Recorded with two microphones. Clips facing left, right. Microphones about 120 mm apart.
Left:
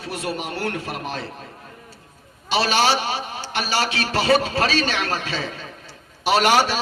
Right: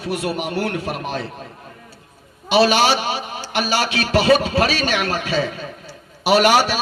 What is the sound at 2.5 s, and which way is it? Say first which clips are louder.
A man's voice: right 4 dB; 15° right (ahead or behind).